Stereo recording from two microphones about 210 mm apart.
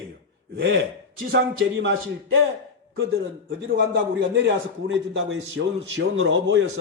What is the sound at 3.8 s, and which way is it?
A man's voice, 60° right (ahead or behind).